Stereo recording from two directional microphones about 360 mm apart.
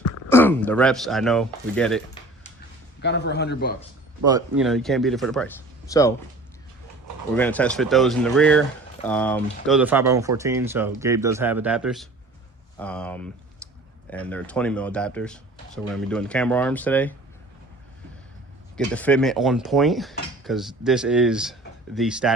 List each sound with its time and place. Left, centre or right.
0.3 s speech: centre
3.0 s speech: left
4.3 s speech: centre
7.3 s speech: centre
13.6 s a sound: centre
14.1 s speech: centre
18.9 s speech: centre